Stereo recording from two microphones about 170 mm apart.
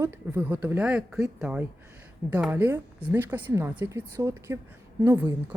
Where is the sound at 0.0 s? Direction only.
10° right (ahead or behind).